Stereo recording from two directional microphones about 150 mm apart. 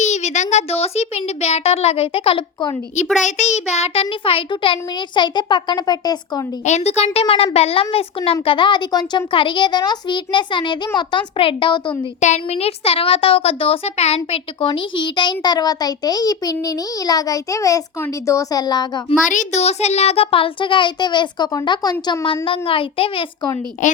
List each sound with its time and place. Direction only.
0.0 s a child's voice: 50° left (ahead or behind)
3.2 s a child's voice: 50° left (ahead or behind); by 6.4 s 25° left (ahead or behind)
6.7 s a child's voice: 50° left (ahead or behind); by 11.9 s 35° left (ahead or behind)
12.2 s a child's voice: 50° left (ahead or behind); by 19.0 s 30° left (ahead or behind)
19.3 s a child's voice: 55° left (ahead or behind); by 23.5 s 35° left (ahead or behind)
23.8 s a woman's voice: 60° left (ahead or behind)